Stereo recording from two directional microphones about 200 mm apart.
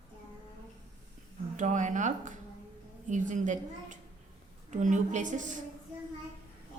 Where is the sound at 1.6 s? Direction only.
40° right (ahead or behind).